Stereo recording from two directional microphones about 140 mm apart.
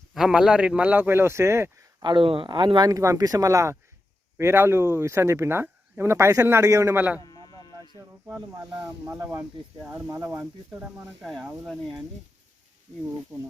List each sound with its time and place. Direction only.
0.1 s speech: 5° right (ahead or behind); by 2.0 s 20° right (ahead or behind)
2.0 s speech: 40° right (ahead or behind); by 7.0 s 20° right (ahead or behind)
9.0 s speech: 20° right (ahead or behind); by 12.0 s centre (ahead or behind)